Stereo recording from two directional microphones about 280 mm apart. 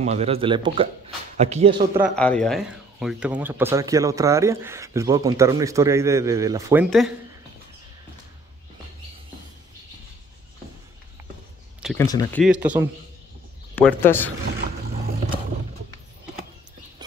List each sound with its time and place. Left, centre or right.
0.0 s speech: right
2.0 s speech: centre
11.8 s speech: centre
13.7 s speech: centre
14.6 s a sound: right